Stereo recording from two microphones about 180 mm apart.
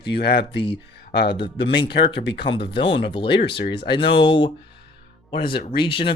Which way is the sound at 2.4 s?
30° left (ahead or behind).